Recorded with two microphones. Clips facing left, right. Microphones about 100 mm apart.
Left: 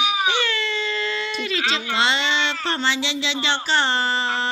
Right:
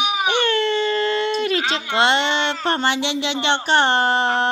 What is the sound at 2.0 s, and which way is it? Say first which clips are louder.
Speech: right 5 dB; 55° right (ahead or behind).